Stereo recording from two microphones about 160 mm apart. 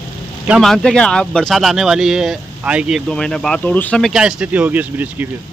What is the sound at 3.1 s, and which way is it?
Speech, 5° left (ahead or behind).